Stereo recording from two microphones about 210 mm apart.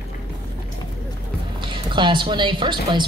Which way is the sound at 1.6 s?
20° right (ahead or behind).